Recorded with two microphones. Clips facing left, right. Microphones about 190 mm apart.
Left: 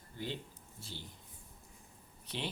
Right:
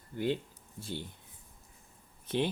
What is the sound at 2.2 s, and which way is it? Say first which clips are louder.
Speech: right 10 dB; 50° right (ahead or behind).